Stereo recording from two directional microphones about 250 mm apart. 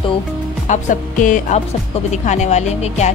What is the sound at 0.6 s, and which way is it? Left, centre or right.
Speech, left.